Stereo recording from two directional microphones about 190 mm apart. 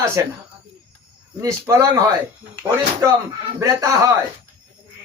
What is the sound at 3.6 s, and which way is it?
Speech, 15° right (ahead or behind).